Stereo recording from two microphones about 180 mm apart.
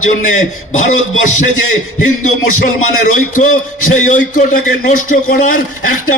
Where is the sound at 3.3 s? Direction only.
45° left (ahead or behind).